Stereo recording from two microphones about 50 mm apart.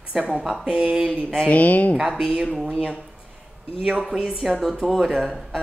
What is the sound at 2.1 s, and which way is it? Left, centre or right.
Speech, centre.